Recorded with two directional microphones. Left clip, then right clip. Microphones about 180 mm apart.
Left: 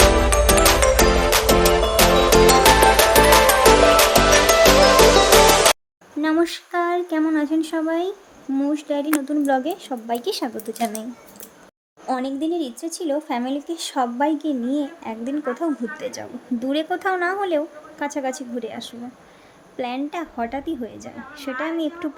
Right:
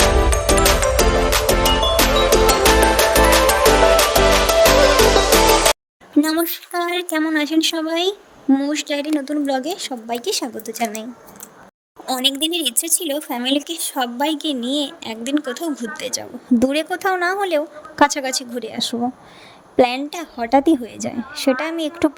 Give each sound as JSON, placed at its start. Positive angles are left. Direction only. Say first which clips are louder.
{"t": 0.0, "sound": "music", "louder": "left 1 dB", "side_deg": 0}
{"t": 6.4, "sound": "female singing", "louder": "left 1 dB", "side_deg": 0}
{"t": 6.9, "sound": "a woman's voice", "louder": "right 1 dB", "side_deg": -50}
{"t": 12.4, "sound": "speech", "louder": "right 4 dB", "side_deg": -60}
{"t": 13.1, "sound": "speech", "louder": "left 4 dB", "side_deg": 0}
{"t": 13.4, "sound": "a woman's voice", "louder": "right 6 dB", "side_deg": -50}
{"t": 13.7, "sound": "speech", "louder": "even", "side_deg": 0}
{"t": 14.3, "sound": "a woman's voice", "louder": "right 1 dB", "side_deg": -50}